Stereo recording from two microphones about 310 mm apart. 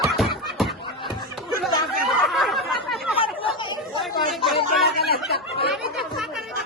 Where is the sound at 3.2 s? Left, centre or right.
Centre.